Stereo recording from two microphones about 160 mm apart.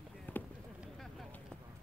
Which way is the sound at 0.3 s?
10° left (ahead or behind).